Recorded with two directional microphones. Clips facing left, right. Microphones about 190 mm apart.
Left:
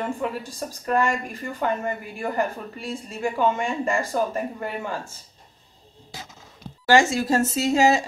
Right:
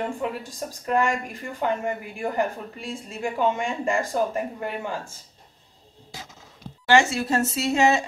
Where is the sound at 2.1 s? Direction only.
15° right (ahead or behind).